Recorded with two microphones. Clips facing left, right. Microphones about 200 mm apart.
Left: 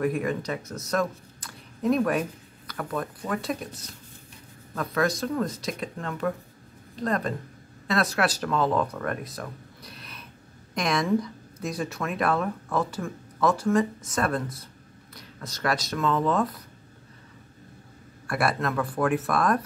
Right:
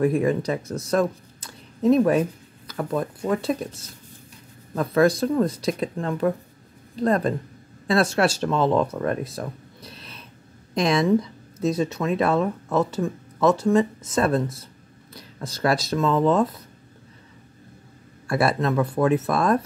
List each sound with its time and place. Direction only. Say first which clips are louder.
0.0 s speech: right 6 dB; 30° right (ahead or behind)
4.7 s a woman's voice: right 7 dB; 30° right (ahead or behind)
18.2 s speech: right 4 dB; 25° right (ahead or behind)